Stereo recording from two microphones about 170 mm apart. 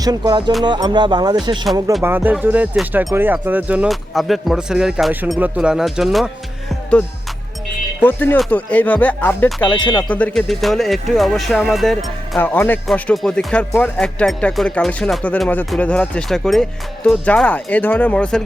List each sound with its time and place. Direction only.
0.0 s speech: 20° right (ahead or behind)
2.0 s speech: 10° right (ahead or behind)
8.0 s speech: 10° left (ahead or behind)
9.6 s speech: 30° left (ahead or behind)
10.1 s speech: 10° left (ahead or behind)
12.4 s speech: 10° left (ahead or behind)